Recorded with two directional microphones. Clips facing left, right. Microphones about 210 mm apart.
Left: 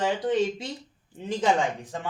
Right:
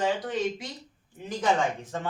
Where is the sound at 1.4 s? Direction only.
15° left (ahead or behind).